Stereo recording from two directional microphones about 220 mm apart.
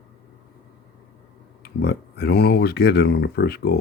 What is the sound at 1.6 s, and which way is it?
Speech, 45° left (ahead or behind).